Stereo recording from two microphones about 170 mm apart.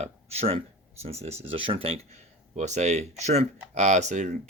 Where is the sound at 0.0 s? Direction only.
35° right (ahead or behind).